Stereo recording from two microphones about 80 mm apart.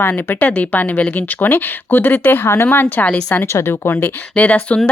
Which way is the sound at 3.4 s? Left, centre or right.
Left.